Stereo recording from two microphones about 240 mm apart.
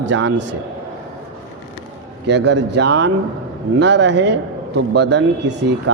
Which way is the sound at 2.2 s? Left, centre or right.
Right.